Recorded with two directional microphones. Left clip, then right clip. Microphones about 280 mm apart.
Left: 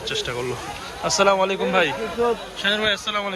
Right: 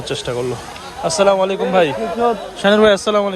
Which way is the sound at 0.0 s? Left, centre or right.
Centre.